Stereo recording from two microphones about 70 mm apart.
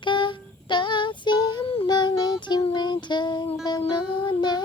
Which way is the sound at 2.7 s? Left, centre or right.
Left.